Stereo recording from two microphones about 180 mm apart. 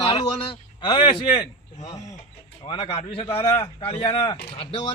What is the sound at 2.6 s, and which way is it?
Speech, 30° left (ahead or behind).